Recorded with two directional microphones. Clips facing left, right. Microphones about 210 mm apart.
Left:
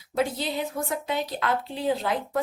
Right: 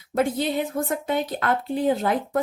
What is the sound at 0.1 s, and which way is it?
Speech, 50° right (ahead or behind).